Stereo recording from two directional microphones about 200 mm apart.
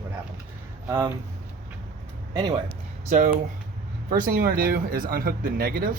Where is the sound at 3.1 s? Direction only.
40° right (ahead or behind).